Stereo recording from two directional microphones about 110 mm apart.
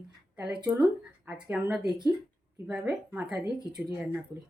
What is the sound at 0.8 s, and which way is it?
Speech, 10° right (ahead or behind).